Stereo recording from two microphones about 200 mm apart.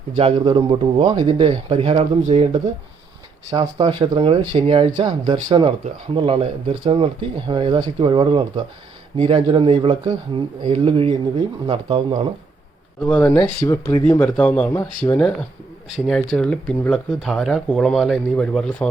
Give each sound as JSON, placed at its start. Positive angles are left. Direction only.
{"t": 0.2, "sound": "speech", "side_deg": -30}
{"t": 13.0, "sound": "speech", "side_deg": 10}